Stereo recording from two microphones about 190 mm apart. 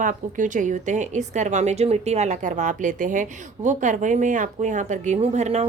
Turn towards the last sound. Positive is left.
turn(degrees=-35)  # may be behind; listen again after turning